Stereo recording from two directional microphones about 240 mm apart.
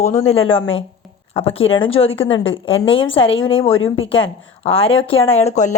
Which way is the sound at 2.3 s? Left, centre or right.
Left.